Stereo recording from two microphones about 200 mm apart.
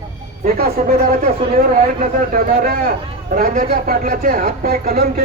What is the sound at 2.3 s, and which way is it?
Speech, 50° right (ahead or behind).